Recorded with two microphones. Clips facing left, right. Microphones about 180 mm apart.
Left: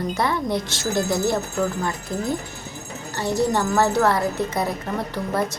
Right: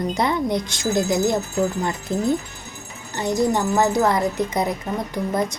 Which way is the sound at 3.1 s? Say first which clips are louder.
Right 1 dB; 15° right (ahead or behind).